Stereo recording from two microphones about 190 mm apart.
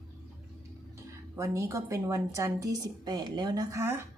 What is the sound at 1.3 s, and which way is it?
A woman's voice, 15° right (ahead or behind).